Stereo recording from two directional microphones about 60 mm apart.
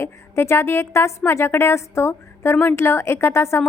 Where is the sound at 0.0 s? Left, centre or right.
Left.